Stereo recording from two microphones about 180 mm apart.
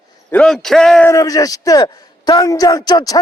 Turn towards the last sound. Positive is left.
turn(degrees=25)  # may be behind; listen again after turning